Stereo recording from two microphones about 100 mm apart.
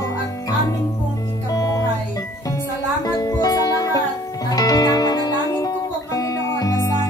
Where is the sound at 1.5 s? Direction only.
40° left (ahead or behind).